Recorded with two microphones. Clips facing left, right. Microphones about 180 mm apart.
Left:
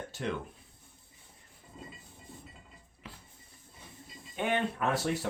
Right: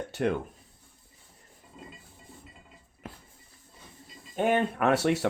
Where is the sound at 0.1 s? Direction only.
60° right (ahead or behind).